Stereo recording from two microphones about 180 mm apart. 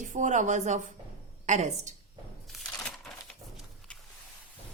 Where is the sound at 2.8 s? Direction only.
5° left (ahead or behind).